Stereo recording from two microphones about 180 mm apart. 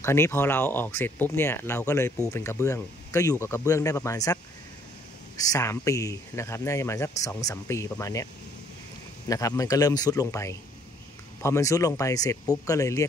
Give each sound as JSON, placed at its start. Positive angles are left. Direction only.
{"t": 0.0, "sound": "speech", "side_deg": 15}
{"t": 5.4, "sound": "speech", "side_deg": 20}
{"t": 9.3, "sound": "speech", "side_deg": 20}